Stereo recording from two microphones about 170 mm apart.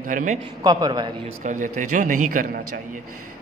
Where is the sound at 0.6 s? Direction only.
20° right (ahead or behind).